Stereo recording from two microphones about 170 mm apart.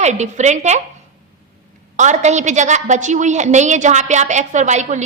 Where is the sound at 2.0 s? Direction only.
45° right (ahead or behind).